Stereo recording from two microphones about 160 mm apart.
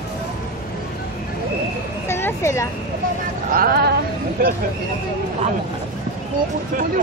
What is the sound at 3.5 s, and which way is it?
Speech, 65° right (ahead or behind).